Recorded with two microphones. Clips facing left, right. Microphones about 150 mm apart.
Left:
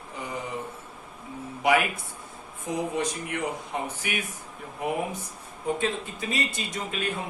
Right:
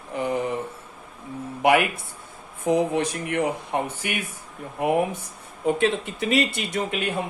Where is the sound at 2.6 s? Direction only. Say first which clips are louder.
Right 7 dB; 60° right (ahead or behind).